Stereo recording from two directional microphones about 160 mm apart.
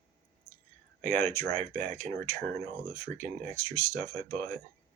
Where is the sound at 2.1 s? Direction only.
15° left (ahead or behind).